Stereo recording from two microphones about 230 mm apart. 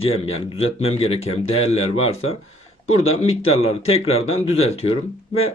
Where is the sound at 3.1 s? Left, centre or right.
Left.